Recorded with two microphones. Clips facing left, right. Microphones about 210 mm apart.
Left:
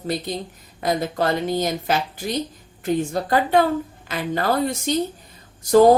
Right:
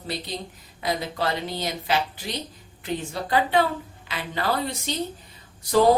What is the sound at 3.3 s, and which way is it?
A woman's voice, 45° left (ahead or behind).